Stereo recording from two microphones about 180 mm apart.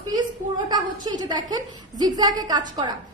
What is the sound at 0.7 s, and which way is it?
A woman's voice, 25° right (ahead or behind).